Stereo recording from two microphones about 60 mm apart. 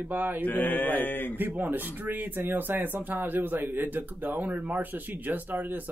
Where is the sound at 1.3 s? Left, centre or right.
Right.